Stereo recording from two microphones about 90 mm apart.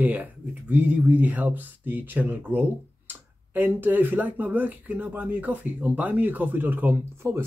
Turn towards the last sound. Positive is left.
turn(degrees=-25)  # may be behind; listen again after turning